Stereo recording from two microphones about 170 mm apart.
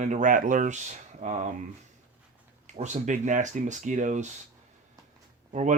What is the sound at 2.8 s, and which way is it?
Speech, 45° right (ahead or behind).